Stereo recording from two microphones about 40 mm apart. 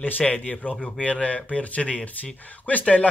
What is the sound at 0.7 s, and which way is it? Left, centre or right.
Speech, centre.